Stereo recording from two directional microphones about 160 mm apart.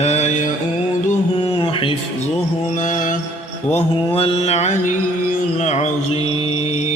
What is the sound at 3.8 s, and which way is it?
Mantra, 35° left (ahead or behind).